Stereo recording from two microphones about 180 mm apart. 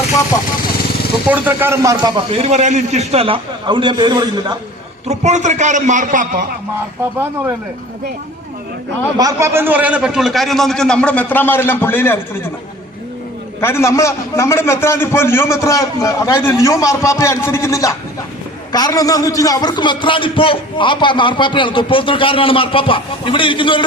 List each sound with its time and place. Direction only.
1.3 s speech: 10° right (ahead or behind)
2.3 s a man's voice: 35° right (ahead or behind)
5.0 s a man's voice: 40° right (ahead or behind)
9.1 s a man's voice: 15° right (ahead or behind); by 12.2 s 10° left (ahead or behind)
13.6 s a man's voice: 15° left (ahead or behind)